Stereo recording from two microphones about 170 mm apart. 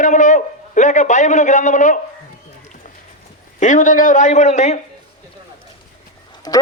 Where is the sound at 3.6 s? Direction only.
50° left (ahead or behind).